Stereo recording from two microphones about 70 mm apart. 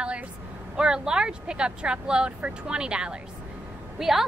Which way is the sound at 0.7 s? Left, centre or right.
Centre.